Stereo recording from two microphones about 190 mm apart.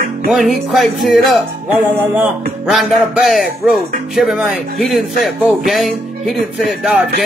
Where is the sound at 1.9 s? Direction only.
10° right (ahead or behind).